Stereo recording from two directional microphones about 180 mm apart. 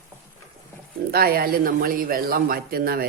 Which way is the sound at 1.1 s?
55° right (ahead or behind).